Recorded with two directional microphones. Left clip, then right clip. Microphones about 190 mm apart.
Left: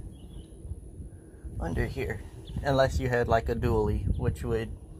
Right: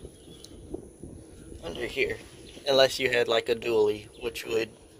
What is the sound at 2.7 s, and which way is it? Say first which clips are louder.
Speech: right 4 dB; 25° right (ahead or behind).